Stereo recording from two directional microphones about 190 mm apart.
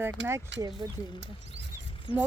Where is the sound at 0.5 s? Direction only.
70° right (ahead or behind).